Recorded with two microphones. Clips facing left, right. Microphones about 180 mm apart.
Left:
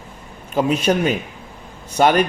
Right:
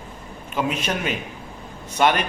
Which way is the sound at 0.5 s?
35° left (ahead or behind).